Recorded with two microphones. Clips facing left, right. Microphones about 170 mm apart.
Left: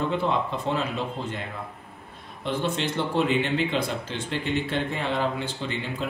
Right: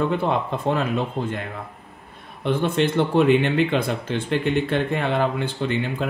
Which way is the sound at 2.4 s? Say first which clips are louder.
Right 6 dB; 55° right (ahead or behind).